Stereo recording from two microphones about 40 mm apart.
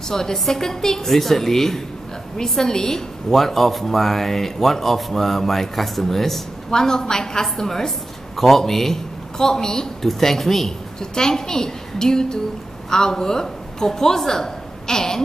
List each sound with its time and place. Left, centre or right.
0.1 s a woman's voice: centre